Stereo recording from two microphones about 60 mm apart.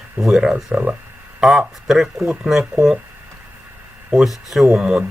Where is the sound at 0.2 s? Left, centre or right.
Centre.